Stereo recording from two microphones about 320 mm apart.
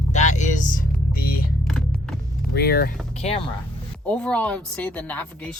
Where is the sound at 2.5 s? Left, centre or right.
Left.